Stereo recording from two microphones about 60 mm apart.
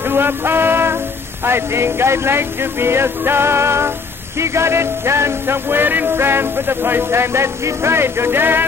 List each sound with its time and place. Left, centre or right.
0.0 s music: right